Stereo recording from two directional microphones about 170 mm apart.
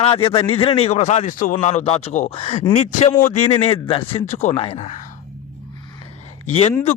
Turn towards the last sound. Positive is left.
turn(degrees=40)  # may be behind; listen again after turning